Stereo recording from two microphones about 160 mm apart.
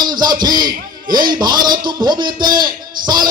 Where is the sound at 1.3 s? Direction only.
25° right (ahead or behind).